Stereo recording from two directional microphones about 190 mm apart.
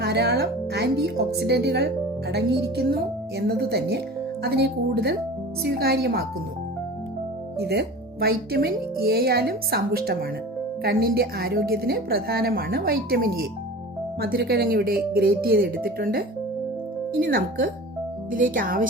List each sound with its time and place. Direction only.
0.0 s speech: 60° right (ahead or behind)
7.6 s a woman's voice: 55° right (ahead or behind)